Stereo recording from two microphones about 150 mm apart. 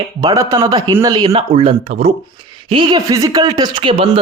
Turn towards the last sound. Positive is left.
turn(degrees=-35)  # may be behind; listen again after turning